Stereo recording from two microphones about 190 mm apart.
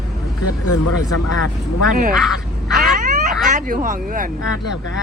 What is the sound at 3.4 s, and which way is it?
Speech, 40° right (ahead or behind).